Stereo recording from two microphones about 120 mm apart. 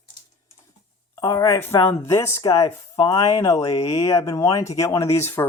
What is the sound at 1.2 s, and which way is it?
Speech, 30° left (ahead or behind).